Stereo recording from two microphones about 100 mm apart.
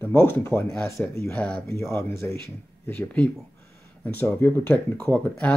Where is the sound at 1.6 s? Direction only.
25° left (ahead or behind).